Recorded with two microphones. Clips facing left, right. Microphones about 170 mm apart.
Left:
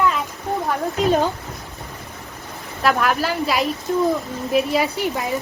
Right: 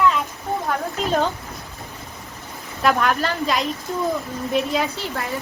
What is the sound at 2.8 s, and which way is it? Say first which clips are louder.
A woman's voice: even; 5° left (ahead or behind).